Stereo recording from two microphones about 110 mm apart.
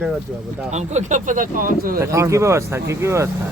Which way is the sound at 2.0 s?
25° right (ahead or behind).